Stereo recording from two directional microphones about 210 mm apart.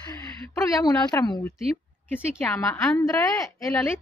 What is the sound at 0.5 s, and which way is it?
Speech, 15° left (ahead or behind).